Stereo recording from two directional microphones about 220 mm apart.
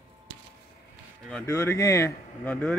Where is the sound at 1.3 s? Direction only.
10° left (ahead or behind).